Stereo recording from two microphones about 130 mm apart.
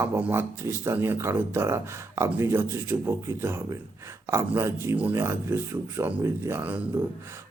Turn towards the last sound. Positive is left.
turn(degrees=-15)  # may be behind; listen again after turning